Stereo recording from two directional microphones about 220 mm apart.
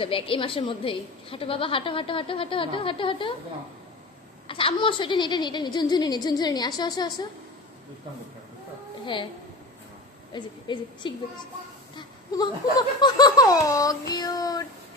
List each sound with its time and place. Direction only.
0.0 s a woman's voice: 25° left (ahead or behind)
4.5 s a woman's voice: 25° left (ahead or behind)
10.3 s a woman's voice: 20° left (ahead or behind)
12.0 s laughter: 20° left (ahead or behind)